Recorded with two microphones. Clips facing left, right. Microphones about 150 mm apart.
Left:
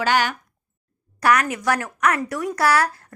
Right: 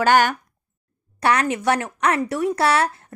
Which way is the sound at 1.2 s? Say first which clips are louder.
Even; 30° right (ahead or behind).